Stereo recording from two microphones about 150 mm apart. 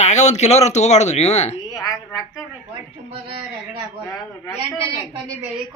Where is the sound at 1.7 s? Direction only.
25° left (ahead or behind).